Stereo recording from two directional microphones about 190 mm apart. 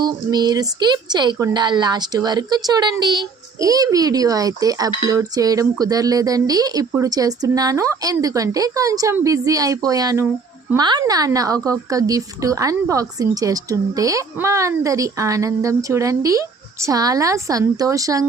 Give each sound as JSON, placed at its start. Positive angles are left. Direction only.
{"t": 0.0, "sound": "a woman's voice", "side_deg": -20}